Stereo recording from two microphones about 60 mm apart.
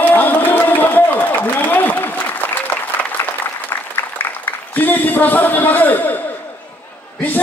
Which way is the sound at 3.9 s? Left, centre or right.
Left.